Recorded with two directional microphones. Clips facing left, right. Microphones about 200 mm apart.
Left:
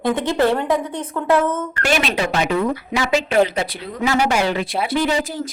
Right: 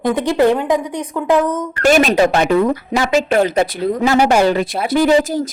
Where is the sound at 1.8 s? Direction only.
45° right (ahead or behind).